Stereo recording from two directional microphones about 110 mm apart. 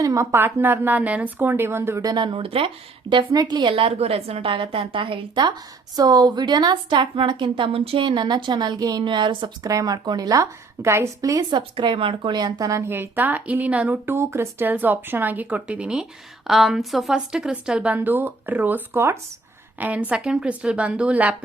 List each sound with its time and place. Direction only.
0.0 s speech: 30° right (ahead or behind); by 3.2 s 50° right (ahead or behind)
3.3 s a woman's voice: 40° right (ahead or behind)
9.6 s a woman's voice: 30° right (ahead or behind)
12.9 s speech: 20° right (ahead or behind)